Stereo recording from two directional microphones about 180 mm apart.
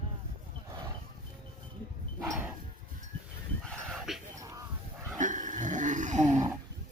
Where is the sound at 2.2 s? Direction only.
5° right (ahead or behind).